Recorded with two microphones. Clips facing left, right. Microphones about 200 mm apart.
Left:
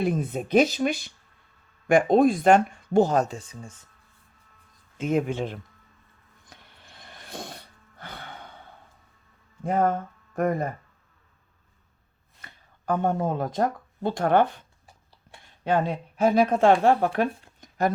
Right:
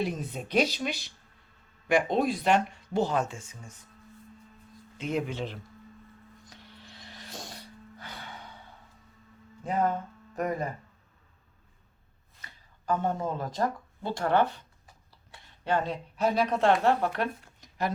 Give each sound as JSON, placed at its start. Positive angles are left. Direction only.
{"t": 0.0, "sound": "speech", "side_deg": 55}
{"t": 4.9, "sound": "speech", "side_deg": 50}
{"t": 6.4, "sound": "music", "side_deg": 55}
{"t": 9.6, "sound": "speech", "side_deg": 50}
{"t": 12.8, "sound": "speech", "side_deg": 55}
{"t": 15.6, "sound": "speech", "side_deg": 50}